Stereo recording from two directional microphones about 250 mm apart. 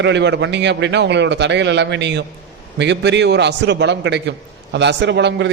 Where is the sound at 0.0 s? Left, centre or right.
Right.